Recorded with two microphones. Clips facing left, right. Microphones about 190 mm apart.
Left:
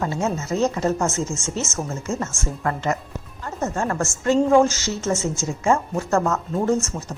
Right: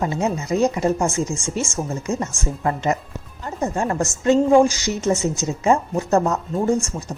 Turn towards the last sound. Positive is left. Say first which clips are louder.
# right 1 dB
turn(degrees=-15)  # may be behind; listen again after turning